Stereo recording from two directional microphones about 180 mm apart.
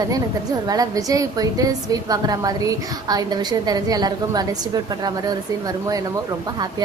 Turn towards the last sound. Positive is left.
turn(degrees=-20)  # may be behind; listen again after turning